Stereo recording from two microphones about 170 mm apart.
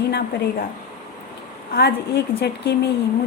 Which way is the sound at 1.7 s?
75° left (ahead or behind).